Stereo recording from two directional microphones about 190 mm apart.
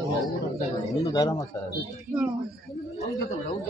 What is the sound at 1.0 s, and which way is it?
Speech, 20° left (ahead or behind).